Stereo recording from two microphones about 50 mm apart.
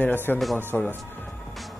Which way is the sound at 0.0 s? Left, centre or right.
Left.